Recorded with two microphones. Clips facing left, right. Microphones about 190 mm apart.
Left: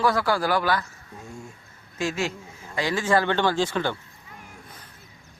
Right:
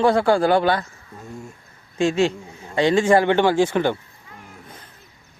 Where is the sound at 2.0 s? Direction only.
25° right (ahead or behind).